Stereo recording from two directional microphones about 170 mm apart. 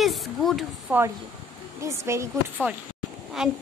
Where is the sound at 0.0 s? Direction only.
Centre (ahead or behind).